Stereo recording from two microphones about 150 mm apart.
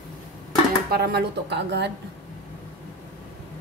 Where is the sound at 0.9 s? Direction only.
90° right.